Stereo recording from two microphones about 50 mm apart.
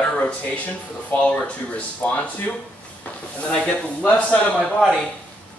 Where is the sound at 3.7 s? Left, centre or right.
Left.